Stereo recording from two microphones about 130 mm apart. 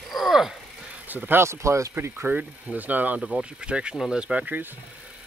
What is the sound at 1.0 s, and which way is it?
Speech, 15° right (ahead or behind).